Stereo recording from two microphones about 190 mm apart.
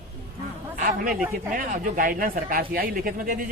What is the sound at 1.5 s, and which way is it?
Speech, 45° right (ahead or behind).